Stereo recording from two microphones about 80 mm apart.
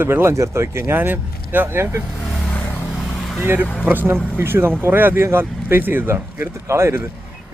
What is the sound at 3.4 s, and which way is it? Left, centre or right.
Speech, right.